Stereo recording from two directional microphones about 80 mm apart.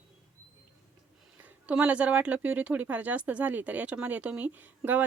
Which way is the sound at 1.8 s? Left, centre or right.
Centre.